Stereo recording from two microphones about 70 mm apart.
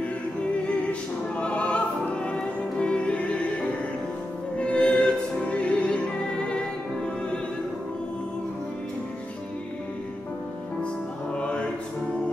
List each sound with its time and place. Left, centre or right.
1.4 s opera: centre
4.6 s opera: centre
11.3 s music: centre